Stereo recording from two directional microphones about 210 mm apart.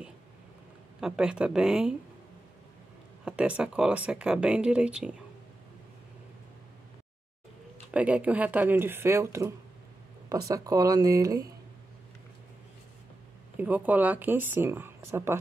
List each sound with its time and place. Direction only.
1.0 s speech: 5° right (ahead or behind)
3.3 s speech: 5° right (ahead or behind)
7.9 s speech: 5° right (ahead or behind)
10.5 s speech: 15° right (ahead or behind)
13.6 s speech: 5° right (ahead or behind)